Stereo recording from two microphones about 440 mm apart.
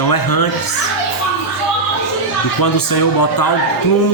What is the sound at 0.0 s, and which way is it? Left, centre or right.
Music, left.